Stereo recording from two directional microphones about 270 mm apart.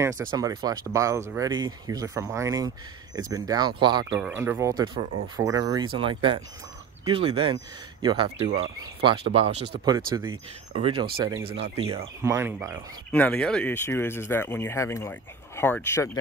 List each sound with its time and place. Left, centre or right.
0.0 s speech: centre
12.2 s speech: centre
13.1 s speech: centre